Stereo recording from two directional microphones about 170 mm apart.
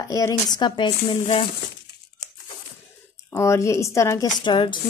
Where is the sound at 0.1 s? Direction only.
20° left (ahead or behind).